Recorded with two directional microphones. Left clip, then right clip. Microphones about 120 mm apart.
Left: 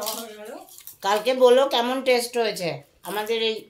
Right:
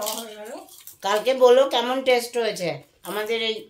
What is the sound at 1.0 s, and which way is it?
Speech, 30° left (ahead or behind).